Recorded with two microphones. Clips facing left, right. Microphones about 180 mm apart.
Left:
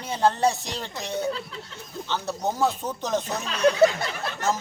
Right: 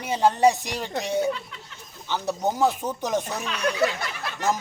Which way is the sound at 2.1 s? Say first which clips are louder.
Right 2 dB; 15° right (ahead or behind).